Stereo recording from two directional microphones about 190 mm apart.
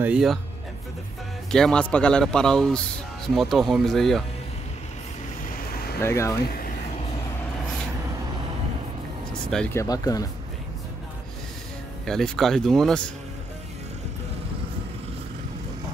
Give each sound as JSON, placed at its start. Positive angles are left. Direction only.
{"t": 0.0, "sound": "a man's voice", "side_deg": -5}
{"t": 1.5, "sound": "a man's voice", "side_deg": 5}
{"t": 5.4, "sound": "vehicle", "side_deg": 55}
{"t": 5.9, "sound": "speech", "side_deg": 15}
{"t": 9.3, "sound": "speech", "side_deg": 5}
{"t": 9.8, "sound": "speech", "side_deg": 20}
{"t": 12.1, "sound": "a man's voice", "side_deg": 0}